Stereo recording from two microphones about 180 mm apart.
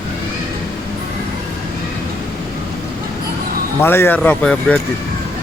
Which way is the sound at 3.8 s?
15° left (ahead or behind).